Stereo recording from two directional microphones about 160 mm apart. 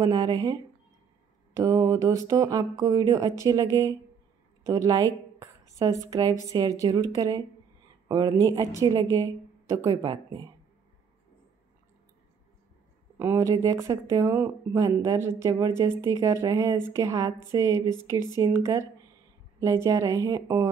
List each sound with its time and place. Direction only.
0.0 s a woman's voice: 20° right (ahead or behind)
4.6 s a woman's voice: 20° right (ahead or behind)
9.8 s a woman's voice: 30° right (ahead or behind)
13.2 s a woman's voice: 15° right (ahead or behind)